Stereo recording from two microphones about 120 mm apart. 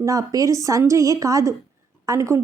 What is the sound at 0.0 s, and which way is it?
A woman's voice, 30° right (ahead or behind).